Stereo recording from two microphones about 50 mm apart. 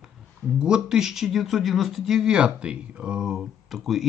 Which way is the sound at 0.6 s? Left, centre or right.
Centre.